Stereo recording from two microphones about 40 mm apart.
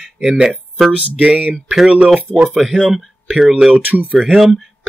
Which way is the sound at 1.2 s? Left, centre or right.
Right.